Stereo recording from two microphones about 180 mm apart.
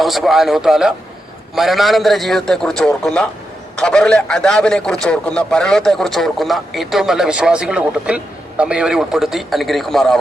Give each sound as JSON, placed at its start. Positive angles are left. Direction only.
{"t": 0.0, "sound": "speech", "side_deg": 0}